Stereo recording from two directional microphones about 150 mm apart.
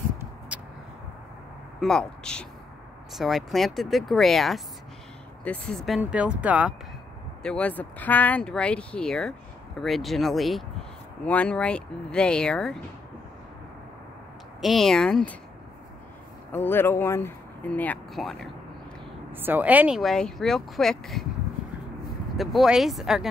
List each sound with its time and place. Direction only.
0.5 s a sound: 10° right (ahead or behind)
1.8 s speech: 5° left (ahead or behind)
5.9 s speech: 5° right (ahead or behind)
7.4 s speech: 10° left (ahead or behind)
14.6 s speech: centre (ahead or behind)
16.5 s speech: 15° left (ahead or behind)
19.3 s speech: 15° right (ahead or behind)
20.0 s speech: 5° left (ahead or behind)
22.4 s speech: centre (ahead or behind)